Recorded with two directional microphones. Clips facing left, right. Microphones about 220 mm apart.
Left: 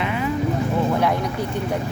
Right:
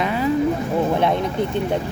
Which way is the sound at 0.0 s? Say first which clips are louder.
Right 3 dB; 35° right (ahead or behind).